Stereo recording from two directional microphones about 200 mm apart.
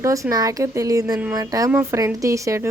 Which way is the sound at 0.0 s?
15° right (ahead or behind).